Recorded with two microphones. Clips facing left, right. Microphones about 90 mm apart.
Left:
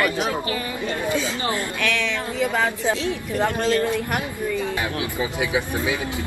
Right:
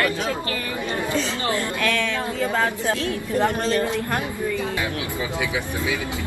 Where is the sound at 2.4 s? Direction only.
15° left (ahead or behind).